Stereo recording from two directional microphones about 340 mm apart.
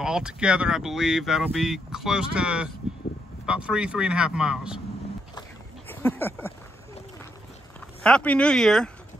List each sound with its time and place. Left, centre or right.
0.0 s speech: centre
5.9 s speech: centre
8.0 s speech: centre